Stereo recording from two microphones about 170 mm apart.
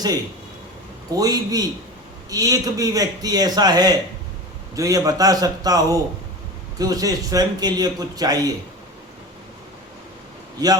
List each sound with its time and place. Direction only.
1.1 s a man's voice: 20° right (ahead or behind)